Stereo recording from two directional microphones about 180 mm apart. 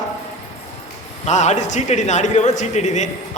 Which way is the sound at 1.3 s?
40° left (ahead or behind).